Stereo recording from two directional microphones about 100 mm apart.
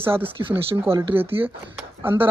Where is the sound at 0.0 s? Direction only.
20° right (ahead or behind).